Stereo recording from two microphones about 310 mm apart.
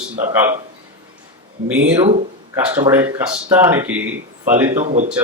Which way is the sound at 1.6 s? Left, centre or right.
Centre.